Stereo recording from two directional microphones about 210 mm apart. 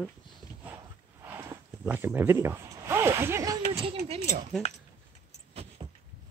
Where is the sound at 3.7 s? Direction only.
30° right (ahead or behind).